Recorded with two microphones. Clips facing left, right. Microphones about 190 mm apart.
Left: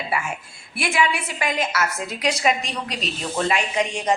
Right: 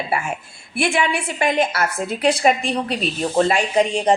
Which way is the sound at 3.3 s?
35° right (ahead or behind).